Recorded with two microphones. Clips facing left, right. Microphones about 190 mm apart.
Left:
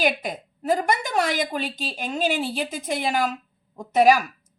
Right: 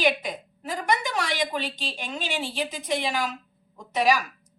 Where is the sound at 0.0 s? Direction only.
45° left (ahead or behind).